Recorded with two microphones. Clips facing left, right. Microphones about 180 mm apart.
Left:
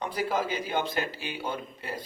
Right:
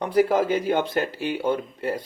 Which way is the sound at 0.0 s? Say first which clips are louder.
Right 9 dB; 60° right (ahead or behind).